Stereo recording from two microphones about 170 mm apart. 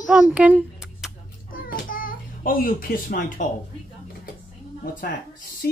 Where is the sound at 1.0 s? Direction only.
Centre (ahead or behind).